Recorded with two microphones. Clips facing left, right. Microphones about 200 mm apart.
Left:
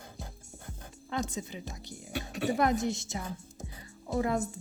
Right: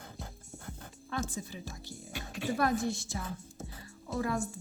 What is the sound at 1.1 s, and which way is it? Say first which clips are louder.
A woman's voice: left 3 dB; 20° left (ahead or behind).